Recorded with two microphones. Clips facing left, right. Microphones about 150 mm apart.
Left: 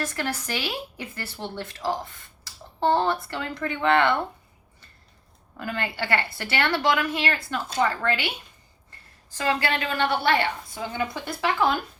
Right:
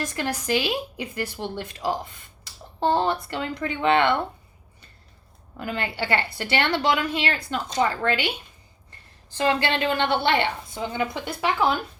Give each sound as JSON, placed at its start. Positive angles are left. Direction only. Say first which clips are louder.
{"t": 0.0, "sound": "a woman's voice", "louder": "right 1 dB", "side_deg": -15}
{"t": 5.5, "sound": "a woman's voice", "louder": "right 1 dB", "side_deg": -15}
{"t": 9.4, "sound": "a woman's voice", "louder": "right 3 dB", "side_deg": -25}